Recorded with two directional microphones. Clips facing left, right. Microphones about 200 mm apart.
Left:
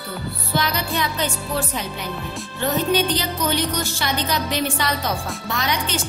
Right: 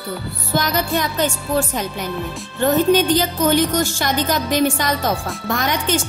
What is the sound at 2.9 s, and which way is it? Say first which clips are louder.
A woman's voice: right 5 dB; 45° right (ahead or behind).